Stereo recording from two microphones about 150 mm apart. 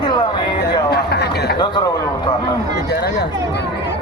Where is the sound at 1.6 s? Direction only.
30° left (ahead or behind).